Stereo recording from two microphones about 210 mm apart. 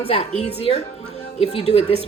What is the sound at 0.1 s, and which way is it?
A woman's voice, 30° left (ahead or behind).